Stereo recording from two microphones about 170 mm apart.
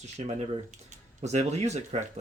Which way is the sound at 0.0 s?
40° right (ahead or behind).